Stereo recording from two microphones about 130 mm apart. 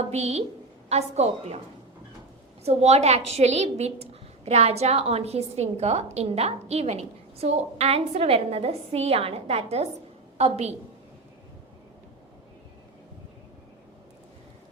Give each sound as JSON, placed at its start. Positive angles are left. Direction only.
{"t": 0.1, "sound": "a woman's voice", "side_deg": -55}
{"t": 2.6, "sound": "a woman's voice", "side_deg": -55}